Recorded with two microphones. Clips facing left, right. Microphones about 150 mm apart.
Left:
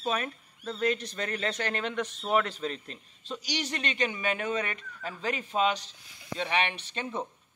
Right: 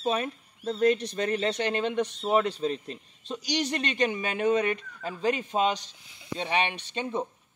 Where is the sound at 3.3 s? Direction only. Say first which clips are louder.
Right 5 dB; 40° right (ahead or behind).